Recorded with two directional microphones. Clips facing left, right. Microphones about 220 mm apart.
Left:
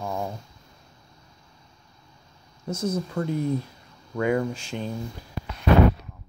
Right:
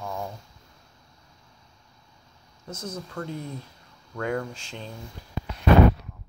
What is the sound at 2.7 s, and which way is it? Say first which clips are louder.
Speech: left 8 dB; 10° left (ahead or behind).